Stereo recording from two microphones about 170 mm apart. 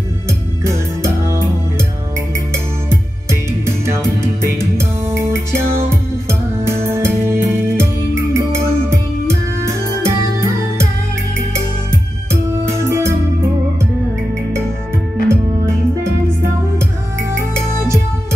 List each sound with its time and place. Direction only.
0.7 s music: 15° right (ahead or behind)
3.3 s music: 15° right (ahead or behind)
12.3 s music: 15° right (ahead or behind)
15.2 s music: 15° right (ahead or behind)
17.3 s music: 15° right (ahead or behind)